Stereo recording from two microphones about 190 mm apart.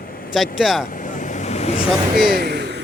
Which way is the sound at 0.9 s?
40° left (ahead or behind).